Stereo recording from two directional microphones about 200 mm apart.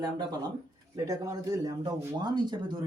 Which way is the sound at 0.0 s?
20° right (ahead or behind).